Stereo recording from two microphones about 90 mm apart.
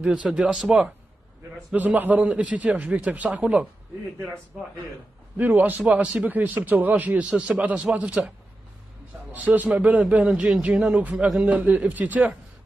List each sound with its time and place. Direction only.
0.0 s a man's voice: 10° right (ahead or behind)
5.4 s a man's voice: 20° right (ahead or behind)
9.3 s a man's voice: 20° right (ahead or behind)